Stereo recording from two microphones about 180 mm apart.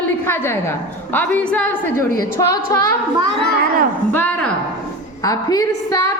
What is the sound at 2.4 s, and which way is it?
Speech, 20° left (ahead or behind).